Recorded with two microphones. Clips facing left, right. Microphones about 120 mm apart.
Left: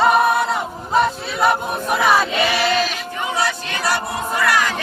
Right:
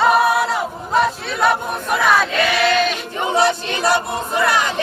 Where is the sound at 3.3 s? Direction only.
25° right (ahead or behind).